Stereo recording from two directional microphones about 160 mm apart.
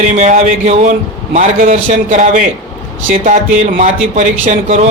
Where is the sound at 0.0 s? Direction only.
50° right (ahead or behind).